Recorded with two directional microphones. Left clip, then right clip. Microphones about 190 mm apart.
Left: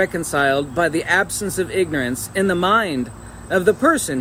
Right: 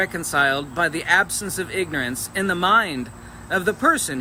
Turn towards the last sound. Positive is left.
turn(degrees=-15)  # may be behind; listen again after turning